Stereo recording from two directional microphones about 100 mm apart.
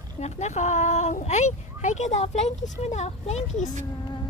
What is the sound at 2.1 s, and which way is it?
A child's voice, 90° left.